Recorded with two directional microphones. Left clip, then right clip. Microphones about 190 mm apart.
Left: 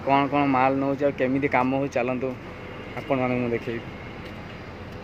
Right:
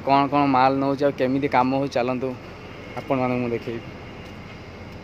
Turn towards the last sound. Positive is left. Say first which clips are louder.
# right 1 dB
turn(degrees=-15)  # may be behind; listen again after turning